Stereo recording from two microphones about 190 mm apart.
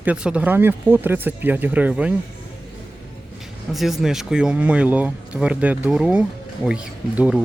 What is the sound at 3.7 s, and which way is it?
Speech, centre (ahead or behind).